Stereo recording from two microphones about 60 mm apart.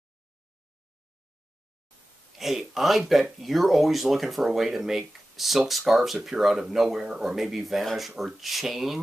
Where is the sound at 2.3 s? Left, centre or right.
Centre.